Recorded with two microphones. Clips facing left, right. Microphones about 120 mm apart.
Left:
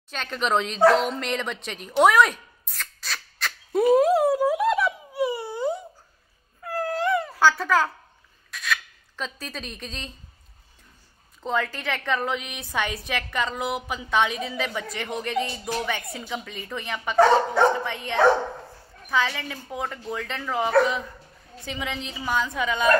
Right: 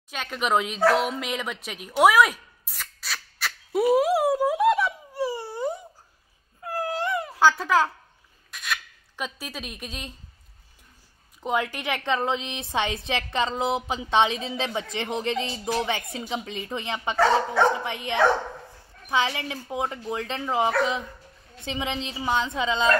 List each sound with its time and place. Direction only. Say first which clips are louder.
0.1 s a woman's voice: even; 10° right (ahead or behind)
0.9 s a sound: left 1 dB; 5° right (ahead or behind)
6.6 s cat: left 2 dB; 10° right (ahead or behind)
8.5 s a sound: left 3 dB; centre (ahead or behind)
9.1 s a woman's voice: even; 10° right (ahead or behind)
11.4 s a woman's voice: even; 15° right (ahead or behind)